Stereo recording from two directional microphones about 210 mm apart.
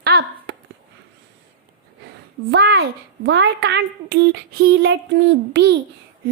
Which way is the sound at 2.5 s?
50° right (ahead or behind).